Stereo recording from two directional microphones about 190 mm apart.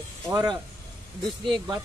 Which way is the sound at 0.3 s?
20° right (ahead or behind).